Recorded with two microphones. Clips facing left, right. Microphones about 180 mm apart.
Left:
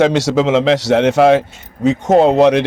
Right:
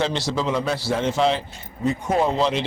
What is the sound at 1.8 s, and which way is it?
Speech, 85° left.